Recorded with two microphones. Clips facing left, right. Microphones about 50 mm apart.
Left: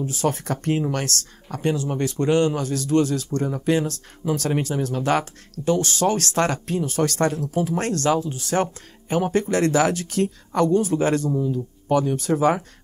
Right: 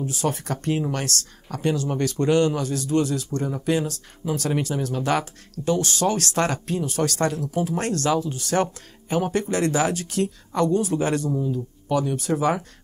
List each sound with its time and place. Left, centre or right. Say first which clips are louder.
0.1 s speech: left 2 dB; left
3.3 s speech: left 2 dB; left
8.5 s speech: even; centre
9.1 s speech: left 2 dB; left